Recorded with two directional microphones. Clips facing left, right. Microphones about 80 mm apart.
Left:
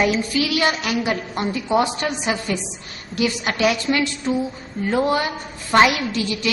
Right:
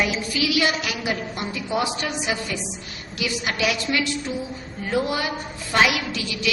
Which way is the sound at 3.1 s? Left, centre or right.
Left.